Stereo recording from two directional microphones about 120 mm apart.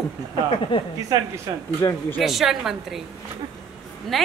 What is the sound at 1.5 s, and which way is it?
Speech, 30° right (ahead or behind).